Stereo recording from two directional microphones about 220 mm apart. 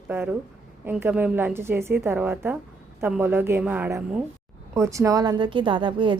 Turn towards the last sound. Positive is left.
turn(degrees=-20)  # may be behind; listen again after turning